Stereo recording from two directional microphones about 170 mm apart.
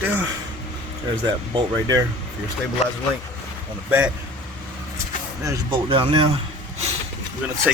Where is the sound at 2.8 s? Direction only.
40° left (ahead or behind).